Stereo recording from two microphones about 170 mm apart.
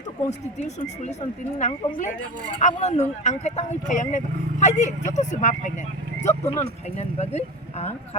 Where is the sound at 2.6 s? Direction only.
45° left (ahead or behind).